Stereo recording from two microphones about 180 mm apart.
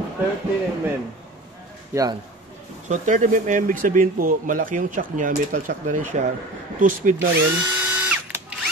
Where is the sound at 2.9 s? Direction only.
45° right (ahead or behind).